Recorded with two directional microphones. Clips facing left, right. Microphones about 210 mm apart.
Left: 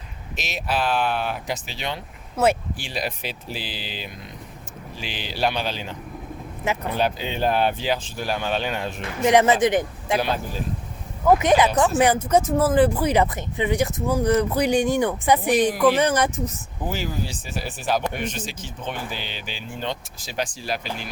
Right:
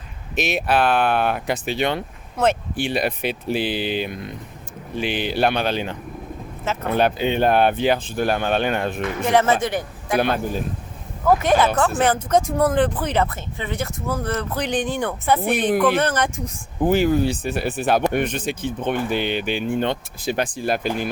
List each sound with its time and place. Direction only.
0.3 s speech: 60° right (ahead or behind)
2.4 s speech: 5° left (ahead or behind)
2.7 s speech: 60° right (ahead or behind)
9.2 s speech: 15° left (ahead or behind)
10.2 s speech: 55° right (ahead or behind)
11.3 s speech: 15° left (ahead or behind)
16.8 s speech: 55° right (ahead or behind)